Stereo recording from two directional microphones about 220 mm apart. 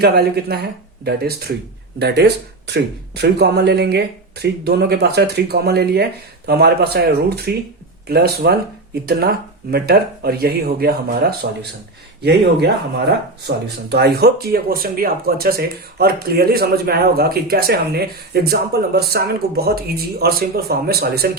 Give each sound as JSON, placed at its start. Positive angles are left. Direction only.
{"t": 0.0, "sound": "speech", "side_deg": -45}
{"t": 9.7, "sound": "speech", "side_deg": -45}